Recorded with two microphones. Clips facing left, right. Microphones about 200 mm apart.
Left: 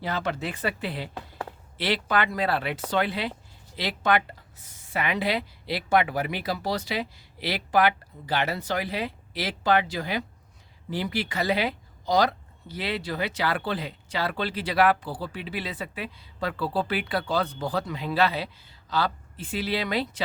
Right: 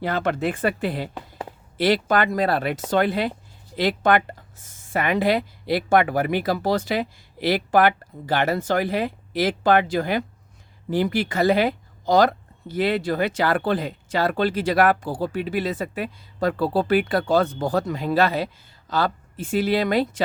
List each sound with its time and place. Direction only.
0.0 s speech: 55° right (ahead or behind)